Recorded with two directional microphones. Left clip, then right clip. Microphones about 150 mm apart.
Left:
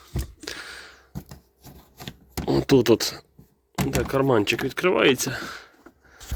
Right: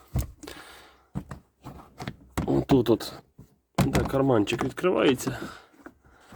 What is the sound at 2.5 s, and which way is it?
Speech, 5° left (ahead or behind).